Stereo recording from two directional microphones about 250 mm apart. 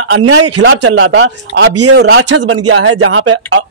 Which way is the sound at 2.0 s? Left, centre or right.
Right.